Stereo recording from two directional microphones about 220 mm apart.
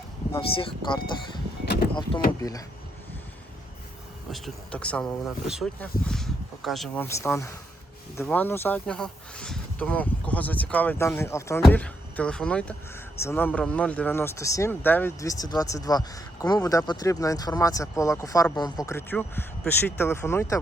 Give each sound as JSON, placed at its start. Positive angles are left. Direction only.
{"t": 0.3, "sound": "speech", "side_deg": 25}
{"t": 2.4, "sound": "speech", "side_deg": 15}
{"t": 4.3, "sound": "speech", "side_deg": 0}